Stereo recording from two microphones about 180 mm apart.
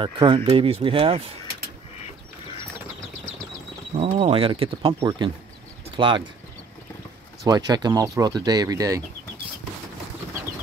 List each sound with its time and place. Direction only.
0.0 s speech: 30° right (ahead or behind)
4.0 s speech: 30° right (ahead or behind)
7.4 s speech: 20° right (ahead or behind)